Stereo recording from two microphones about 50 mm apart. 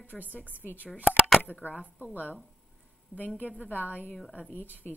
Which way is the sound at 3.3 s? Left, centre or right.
Left.